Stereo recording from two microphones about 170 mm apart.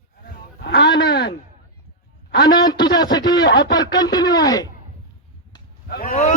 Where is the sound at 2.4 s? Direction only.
25° left (ahead or behind).